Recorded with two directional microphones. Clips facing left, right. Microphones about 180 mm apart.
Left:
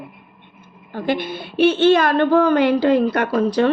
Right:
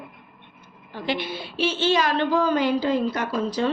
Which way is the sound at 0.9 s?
50° left (ahead or behind).